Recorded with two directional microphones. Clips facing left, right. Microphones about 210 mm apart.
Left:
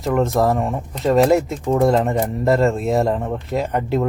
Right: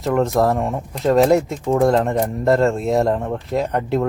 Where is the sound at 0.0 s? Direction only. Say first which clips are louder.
Even; centre (ahead or behind).